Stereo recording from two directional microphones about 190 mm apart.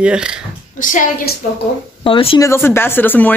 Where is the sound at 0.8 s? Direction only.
45° left (ahead or behind).